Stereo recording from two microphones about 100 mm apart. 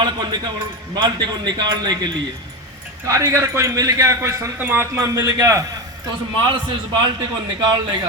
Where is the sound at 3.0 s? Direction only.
35° right (ahead or behind).